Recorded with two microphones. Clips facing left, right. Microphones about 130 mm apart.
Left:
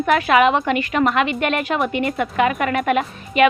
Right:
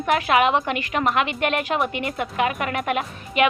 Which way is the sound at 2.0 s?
50° left (ahead or behind).